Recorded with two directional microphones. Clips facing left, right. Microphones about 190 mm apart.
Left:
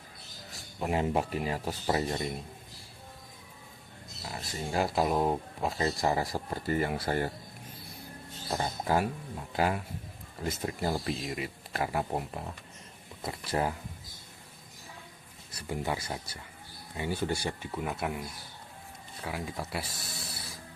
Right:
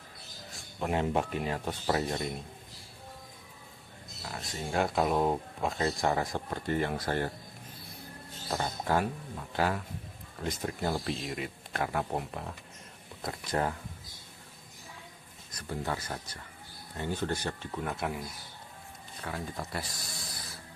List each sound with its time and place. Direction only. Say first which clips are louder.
0.8 s speech: even; 5° left (ahead or behind)
4.3 s speech: left 1 dB; centre (ahead or behind)
8.5 s speech: left 1 dB; 10° left (ahead or behind)
15.5 s speech: left 2 dB; 15° left (ahead or behind)
19.2 s speech: left 1 dB; 10° left (ahead or behind)